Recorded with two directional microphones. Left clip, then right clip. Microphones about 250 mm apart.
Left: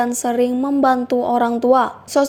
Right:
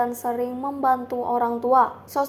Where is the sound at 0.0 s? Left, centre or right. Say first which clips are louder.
Left 6 dB; left.